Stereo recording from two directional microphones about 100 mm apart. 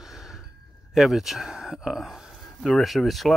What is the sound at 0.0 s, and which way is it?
Sigh, 5° right (ahead or behind).